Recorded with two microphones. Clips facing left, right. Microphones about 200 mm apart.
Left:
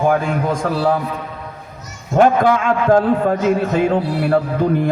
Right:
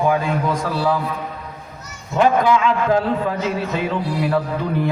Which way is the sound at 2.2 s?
50° left (ahead or behind).